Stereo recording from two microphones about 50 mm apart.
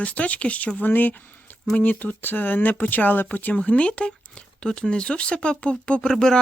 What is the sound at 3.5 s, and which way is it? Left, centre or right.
Speech, left.